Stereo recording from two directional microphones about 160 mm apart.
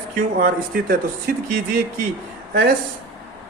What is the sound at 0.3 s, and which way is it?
Speech, 60° right (ahead or behind).